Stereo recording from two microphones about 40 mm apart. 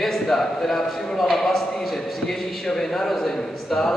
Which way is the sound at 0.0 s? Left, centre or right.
Centre.